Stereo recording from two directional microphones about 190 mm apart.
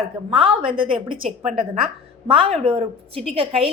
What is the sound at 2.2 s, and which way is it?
A woman's voice, 25° right (ahead or behind).